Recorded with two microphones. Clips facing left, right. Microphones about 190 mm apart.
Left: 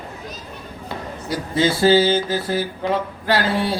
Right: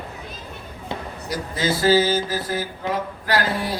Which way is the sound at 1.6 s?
25° left (ahead or behind).